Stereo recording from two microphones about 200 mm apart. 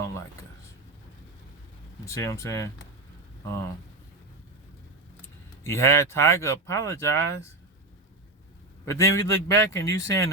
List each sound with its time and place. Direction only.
2.0 s speech: 15° left (ahead or behind)
5.6 s speech: 15° left (ahead or behind)
8.9 s speech: 15° left (ahead or behind)